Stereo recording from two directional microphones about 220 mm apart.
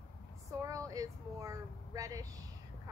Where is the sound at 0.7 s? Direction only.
15° right (ahead or behind).